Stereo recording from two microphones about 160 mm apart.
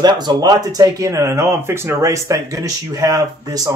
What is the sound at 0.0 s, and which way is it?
Speech, 25° right (ahead or behind).